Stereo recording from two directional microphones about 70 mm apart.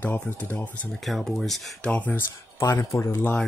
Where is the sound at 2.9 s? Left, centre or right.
Left.